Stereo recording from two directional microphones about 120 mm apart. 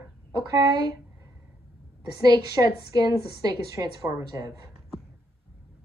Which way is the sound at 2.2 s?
35° right (ahead or behind).